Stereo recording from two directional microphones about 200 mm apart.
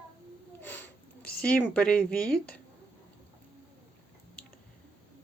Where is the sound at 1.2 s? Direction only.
50° left (ahead or behind).